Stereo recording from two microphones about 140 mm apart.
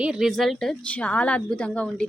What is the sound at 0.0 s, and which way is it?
A woman's voice, 5° right (ahead or behind).